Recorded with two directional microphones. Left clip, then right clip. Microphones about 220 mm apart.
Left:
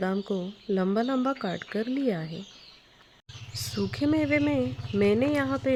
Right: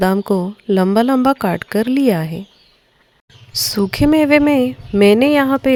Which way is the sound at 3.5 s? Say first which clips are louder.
Right 14 dB; 40° right (ahead or behind).